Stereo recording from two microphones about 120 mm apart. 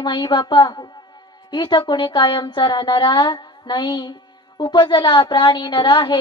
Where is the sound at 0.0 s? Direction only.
40° left (ahead or behind).